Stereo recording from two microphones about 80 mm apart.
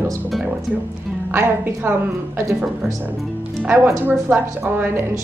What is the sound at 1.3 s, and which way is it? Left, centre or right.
Speech, right.